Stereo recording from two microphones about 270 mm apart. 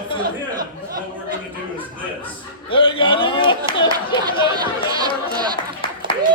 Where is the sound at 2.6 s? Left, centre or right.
Centre.